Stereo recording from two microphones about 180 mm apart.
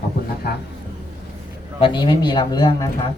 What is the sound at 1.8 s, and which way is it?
Speech, 25° left (ahead or behind).